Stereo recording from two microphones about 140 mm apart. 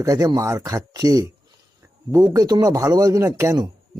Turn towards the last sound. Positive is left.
turn(degrees=-25)  # may be behind; listen again after turning